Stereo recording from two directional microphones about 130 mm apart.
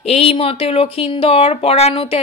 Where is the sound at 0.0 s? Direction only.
50° left (ahead or behind).